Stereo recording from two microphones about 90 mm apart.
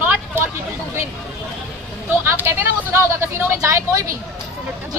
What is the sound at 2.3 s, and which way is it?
Speech, 25° right (ahead or behind).